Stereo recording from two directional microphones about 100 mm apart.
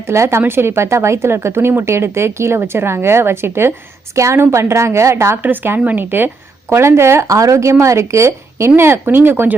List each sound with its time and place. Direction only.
0.1 s a woman's voice: 25° right (ahead or behind)